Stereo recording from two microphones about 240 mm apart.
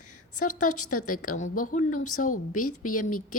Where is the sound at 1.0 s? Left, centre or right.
Left.